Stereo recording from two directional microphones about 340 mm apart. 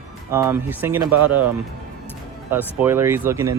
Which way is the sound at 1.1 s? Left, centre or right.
Right.